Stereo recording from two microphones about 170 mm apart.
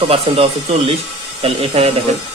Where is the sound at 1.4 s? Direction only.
35° right (ahead or behind).